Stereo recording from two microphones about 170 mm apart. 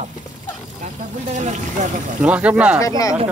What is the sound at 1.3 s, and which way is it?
Speech, 45° right (ahead or behind).